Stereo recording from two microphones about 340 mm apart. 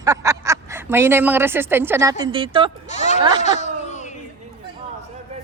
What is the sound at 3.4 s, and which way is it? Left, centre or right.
Baby cry, centre.